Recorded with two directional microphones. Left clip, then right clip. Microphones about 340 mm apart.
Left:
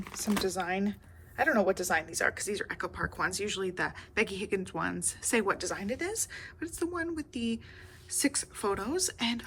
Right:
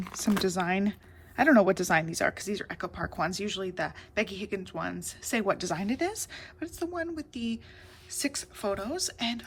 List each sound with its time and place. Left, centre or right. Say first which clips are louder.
0.4 s speech: right 3 dB; centre